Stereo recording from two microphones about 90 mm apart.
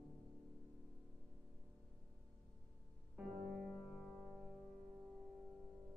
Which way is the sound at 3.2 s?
5° right (ahead or behind).